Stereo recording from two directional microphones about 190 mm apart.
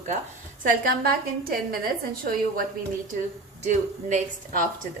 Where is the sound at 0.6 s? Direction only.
50° right (ahead or behind).